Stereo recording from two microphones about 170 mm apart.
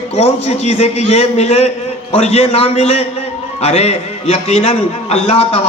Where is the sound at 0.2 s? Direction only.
35° left (ahead or behind).